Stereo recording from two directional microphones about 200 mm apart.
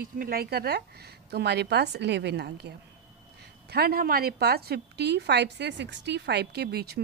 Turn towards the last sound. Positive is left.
turn(degrees=-50)  # may be behind; listen again after turning